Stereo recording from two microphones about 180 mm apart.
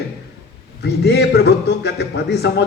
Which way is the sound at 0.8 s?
70° left (ahead or behind).